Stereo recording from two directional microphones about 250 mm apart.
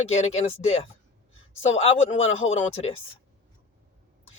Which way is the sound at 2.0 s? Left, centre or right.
Left.